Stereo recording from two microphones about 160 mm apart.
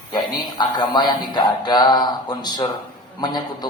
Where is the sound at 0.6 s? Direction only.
25° left (ahead or behind).